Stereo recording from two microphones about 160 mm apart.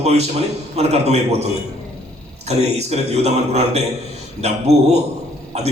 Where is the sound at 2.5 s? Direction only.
40° right (ahead or behind).